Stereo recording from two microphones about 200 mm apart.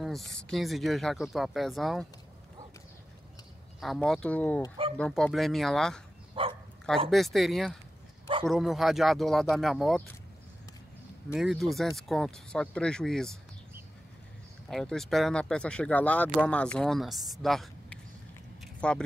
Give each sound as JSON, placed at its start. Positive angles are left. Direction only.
{"t": 0.0, "sound": "speech", "side_deg": 0}
{"t": 3.8, "sound": "speech", "side_deg": 0}
{"t": 6.4, "sound": "bow-wow", "side_deg": -25}
{"t": 7.1, "sound": "speech", "side_deg": 0}
{"t": 11.3, "sound": "speech", "side_deg": 0}
{"t": 14.7, "sound": "speech", "side_deg": 0}
{"t": 18.6, "sound": "a sound", "side_deg": 5}